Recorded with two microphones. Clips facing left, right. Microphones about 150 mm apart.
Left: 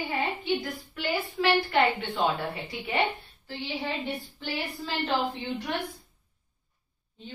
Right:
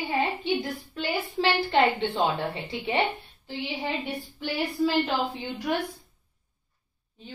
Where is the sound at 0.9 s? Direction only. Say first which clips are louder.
Even; 25° right (ahead or behind).